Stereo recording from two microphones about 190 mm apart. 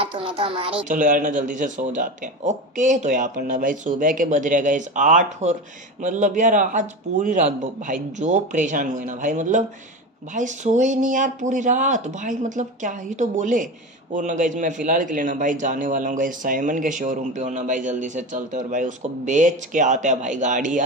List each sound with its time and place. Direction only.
0.0 s speech: 25° right (ahead or behind)
0.8 s a man's voice: 45° right (ahead or behind)